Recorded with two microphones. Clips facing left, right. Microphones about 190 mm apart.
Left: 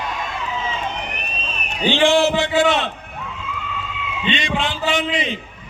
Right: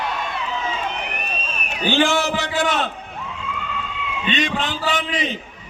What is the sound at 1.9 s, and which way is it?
A man's voice, 40° right (ahead or behind).